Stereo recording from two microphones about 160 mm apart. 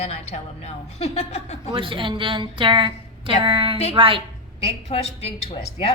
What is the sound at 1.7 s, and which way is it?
A woman's voice, 30° right (ahead or behind).